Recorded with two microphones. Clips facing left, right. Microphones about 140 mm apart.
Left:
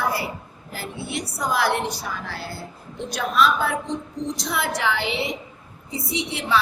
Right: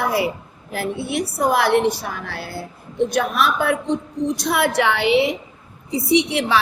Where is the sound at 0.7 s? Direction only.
55° right (ahead or behind).